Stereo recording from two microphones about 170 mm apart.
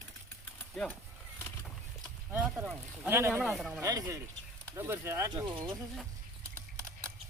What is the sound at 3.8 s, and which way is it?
Speech, 20° right (ahead or behind).